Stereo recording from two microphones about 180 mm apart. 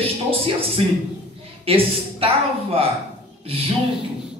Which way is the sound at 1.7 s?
30° right (ahead or behind).